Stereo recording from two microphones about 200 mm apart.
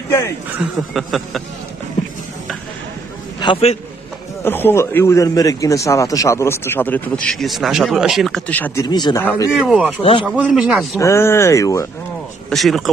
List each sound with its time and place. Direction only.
0.5 s speech: centre (ahead or behind)
3.3 s a man's voice: 25° left (ahead or behind)
4.5 s a man's voice: 10° left (ahead or behind)
8.8 s speech: 20° left (ahead or behind)
9.2 s a man's voice: 10° left (ahead or behind)
9.5 s speech: 5° right (ahead or behind)
11.0 s a man's voice: 15° left (ahead or behind)
12.4 s speech: centre (ahead or behind)